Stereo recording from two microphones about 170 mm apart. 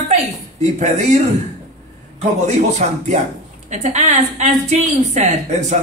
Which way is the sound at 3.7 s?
45° right (ahead or behind).